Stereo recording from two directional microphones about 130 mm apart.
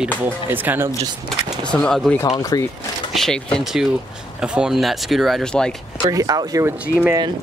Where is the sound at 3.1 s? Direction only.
5° left (ahead or behind).